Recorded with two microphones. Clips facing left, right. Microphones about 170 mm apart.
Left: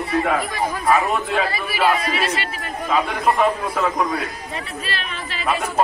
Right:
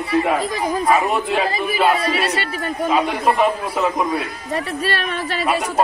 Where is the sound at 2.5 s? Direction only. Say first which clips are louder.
Right 4 dB; 30° right (ahead or behind).